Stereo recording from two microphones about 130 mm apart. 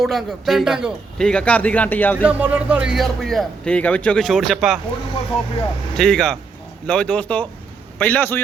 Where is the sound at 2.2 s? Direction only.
10° right (ahead or behind).